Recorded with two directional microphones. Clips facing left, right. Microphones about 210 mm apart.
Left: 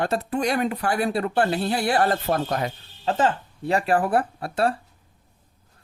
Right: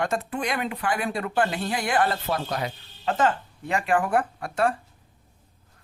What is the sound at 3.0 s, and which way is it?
Speech, 35° left (ahead or behind).